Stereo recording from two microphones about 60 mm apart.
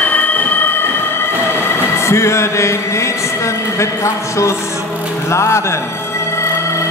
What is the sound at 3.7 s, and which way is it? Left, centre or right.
Speech, left.